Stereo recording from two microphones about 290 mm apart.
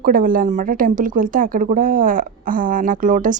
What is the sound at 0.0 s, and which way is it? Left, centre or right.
A woman's voice, right.